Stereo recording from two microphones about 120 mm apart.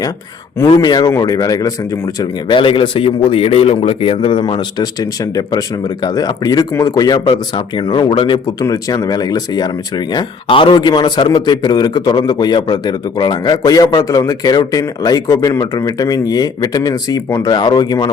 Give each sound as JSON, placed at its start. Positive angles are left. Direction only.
{"t": 0.8, "sound": "speech", "side_deg": 35}
{"t": 2.6, "sound": "a man's voice", "side_deg": 45}
{"t": 8.6, "sound": "speech", "side_deg": 30}